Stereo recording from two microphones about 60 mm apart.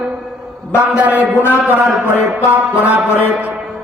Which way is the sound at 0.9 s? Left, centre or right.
Right.